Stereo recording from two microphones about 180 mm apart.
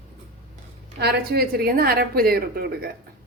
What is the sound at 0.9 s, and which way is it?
A woman's voice, 60° right (ahead or behind).